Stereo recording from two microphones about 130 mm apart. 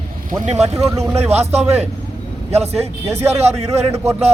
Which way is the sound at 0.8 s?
20° right (ahead or behind).